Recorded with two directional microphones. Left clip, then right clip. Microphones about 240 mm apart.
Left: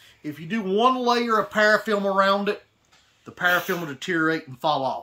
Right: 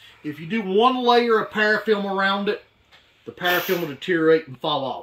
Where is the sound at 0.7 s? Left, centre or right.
Centre.